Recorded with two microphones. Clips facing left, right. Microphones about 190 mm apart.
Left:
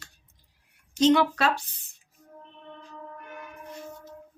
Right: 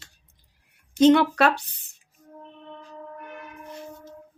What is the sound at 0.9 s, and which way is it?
Speech, 60° right (ahead or behind).